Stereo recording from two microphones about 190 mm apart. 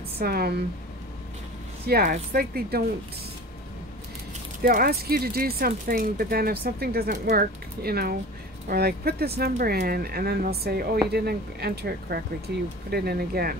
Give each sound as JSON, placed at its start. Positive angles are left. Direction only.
{"t": 0.2, "sound": "speech", "side_deg": -55}
{"t": 1.9, "sound": "speech", "side_deg": -55}
{"t": 4.6, "sound": "speech", "side_deg": -50}